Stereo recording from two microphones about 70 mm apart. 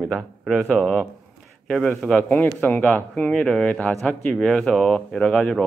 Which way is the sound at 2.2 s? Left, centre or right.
Left.